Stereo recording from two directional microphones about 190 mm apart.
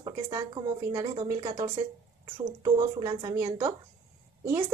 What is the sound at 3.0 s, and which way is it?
Speech, 20° right (ahead or behind).